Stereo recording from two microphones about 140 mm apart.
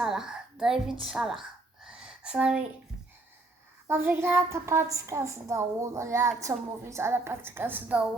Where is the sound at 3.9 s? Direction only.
15° right (ahead or behind).